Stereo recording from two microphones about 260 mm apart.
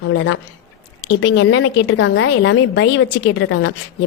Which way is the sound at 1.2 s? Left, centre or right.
Left.